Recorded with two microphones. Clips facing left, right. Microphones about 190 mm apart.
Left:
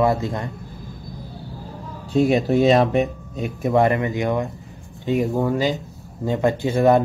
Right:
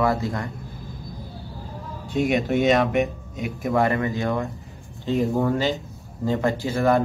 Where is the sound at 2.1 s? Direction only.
30° left (ahead or behind).